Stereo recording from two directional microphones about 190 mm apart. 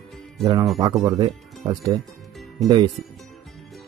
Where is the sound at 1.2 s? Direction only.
20° right (ahead or behind).